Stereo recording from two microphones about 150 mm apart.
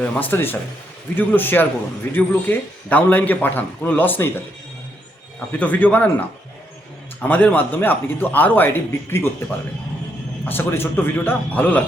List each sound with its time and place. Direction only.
0.0 s a man's voice: 10° left (ahead or behind)
5.5 s a man's voice: 10° left (ahead or behind)
10.4 s a man's voice: 15° left (ahead or behind)